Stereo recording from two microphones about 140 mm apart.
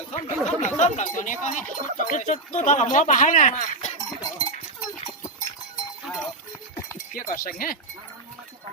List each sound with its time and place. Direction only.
0.1 s a sound: 55° left (ahead or behind)
0.8 s speech: 60° left (ahead or behind)
6.1 s goat: centre (ahead or behind)
7.1 s speech: 90° left